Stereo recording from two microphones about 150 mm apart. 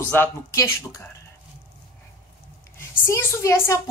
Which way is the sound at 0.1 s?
15° left (ahead or behind).